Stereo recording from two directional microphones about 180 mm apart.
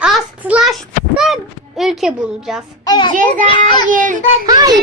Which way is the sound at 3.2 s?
45° right (ahead or behind).